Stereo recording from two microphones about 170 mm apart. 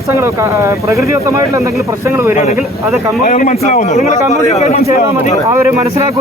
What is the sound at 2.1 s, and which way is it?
Speech, 15° right (ahead or behind).